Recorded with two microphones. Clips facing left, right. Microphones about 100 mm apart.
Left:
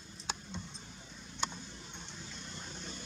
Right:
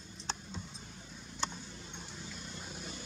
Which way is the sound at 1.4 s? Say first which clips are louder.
Even; centre (ahead or behind).